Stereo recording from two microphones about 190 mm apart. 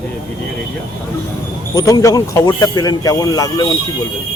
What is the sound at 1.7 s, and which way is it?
Speech, 20° left (ahead or behind).